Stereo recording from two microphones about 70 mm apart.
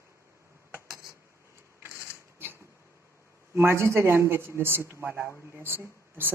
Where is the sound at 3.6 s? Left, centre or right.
Right.